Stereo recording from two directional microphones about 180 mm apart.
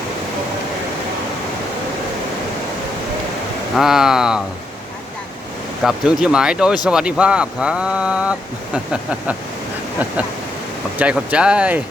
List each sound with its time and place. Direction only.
3.8 s speech: centre (ahead or behind)
5.8 s speech: 5° right (ahead or behind)
10.9 s speech: 5° right (ahead or behind)